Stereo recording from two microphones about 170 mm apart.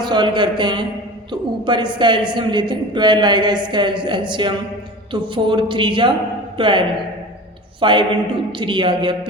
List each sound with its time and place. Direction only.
0.0 s a woman's voice: 25° right (ahead or behind)